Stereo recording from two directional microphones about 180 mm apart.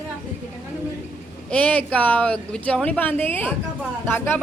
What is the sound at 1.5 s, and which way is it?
Speech, 10° left (ahead or behind).